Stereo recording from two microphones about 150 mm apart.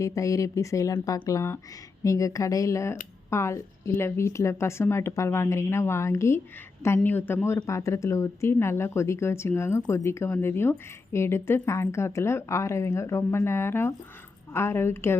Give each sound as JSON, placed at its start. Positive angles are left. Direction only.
{"t": 0.0, "sound": "a woman's voice", "side_deg": 20}